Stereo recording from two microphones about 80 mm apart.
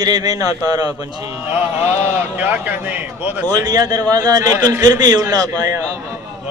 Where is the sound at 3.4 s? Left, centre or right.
Right.